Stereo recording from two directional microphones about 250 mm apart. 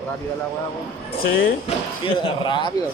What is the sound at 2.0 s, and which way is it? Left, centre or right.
Speech, left.